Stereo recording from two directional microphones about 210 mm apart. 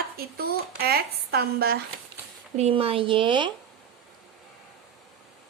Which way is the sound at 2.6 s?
30° right (ahead or behind).